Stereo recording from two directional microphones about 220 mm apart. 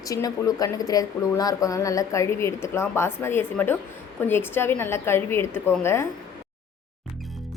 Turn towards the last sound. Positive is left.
turn(degrees=10)  # may be behind; listen again after turning